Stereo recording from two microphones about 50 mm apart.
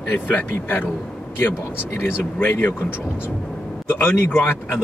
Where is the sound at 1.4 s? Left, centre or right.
Left.